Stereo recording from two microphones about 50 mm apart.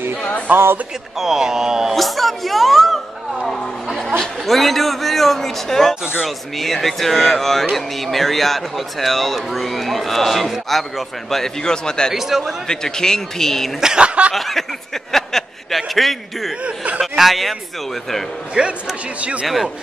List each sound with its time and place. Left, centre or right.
0.5 s speech: right
1.2 s speech: centre
2.0 s a woman's voice: centre
4.2 s a man's voice: centre
12.1 s speech: centre
12.6 s a man's voice: centre
13.7 s speech: centre
14.3 s a man's voice: centre
16.6 s speech: right
17.0 s a man's voice: centre
18.5 s speech: centre
19.4 s a man's voice: centre